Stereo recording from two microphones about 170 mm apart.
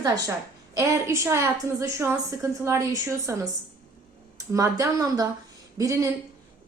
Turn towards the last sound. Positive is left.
turn(degrees=-20)  # may be behind; listen again after turning